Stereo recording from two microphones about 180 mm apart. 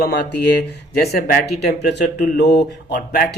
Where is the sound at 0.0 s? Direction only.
65° left (ahead or behind).